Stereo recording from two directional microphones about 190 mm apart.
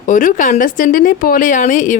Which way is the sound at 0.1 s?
45° left (ahead or behind).